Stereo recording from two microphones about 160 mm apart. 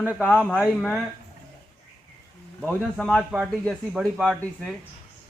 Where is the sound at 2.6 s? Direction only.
10° left (ahead or behind).